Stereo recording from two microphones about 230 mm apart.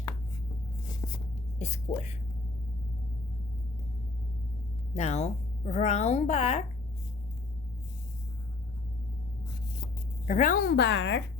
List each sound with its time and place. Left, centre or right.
1.0 s writing: centre
1.5 s a woman's voice: left
4.9 s speech: left
10.2 s a woman's voice: left